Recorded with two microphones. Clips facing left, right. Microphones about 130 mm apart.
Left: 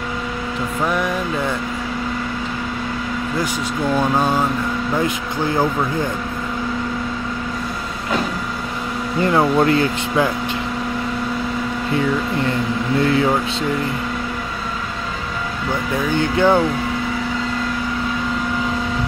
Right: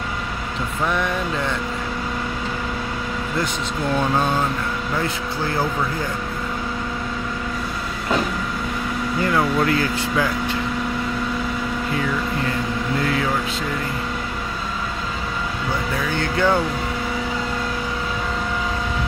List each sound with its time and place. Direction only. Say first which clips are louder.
0.8 s speech: left 2 dB; 5° left (ahead or behind)
9.2 s speech: left 5 dB; 30° left (ahead or behind)
13.0 s speech: left 7 dB; 30° left (ahead or behind)
16.2 s speech: left 4 dB; 15° left (ahead or behind)